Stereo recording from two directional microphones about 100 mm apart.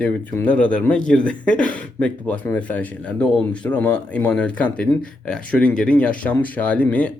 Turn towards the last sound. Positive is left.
turn(degrees=15)  # may be behind; listen again after turning